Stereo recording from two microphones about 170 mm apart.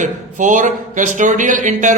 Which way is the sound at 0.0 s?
45° right (ahead or behind).